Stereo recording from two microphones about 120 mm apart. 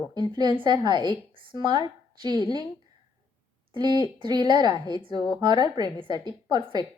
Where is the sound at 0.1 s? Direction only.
35° right (ahead or behind).